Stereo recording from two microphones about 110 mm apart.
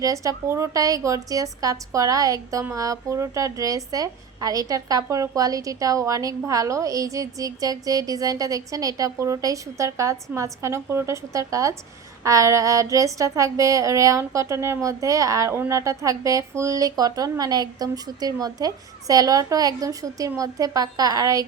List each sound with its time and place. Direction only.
0.0 s a woman's voice: 30° right (ahead or behind)
10.3 s a sound: 25° right (ahead or behind)
15.7 s a woman's voice: 30° right (ahead or behind)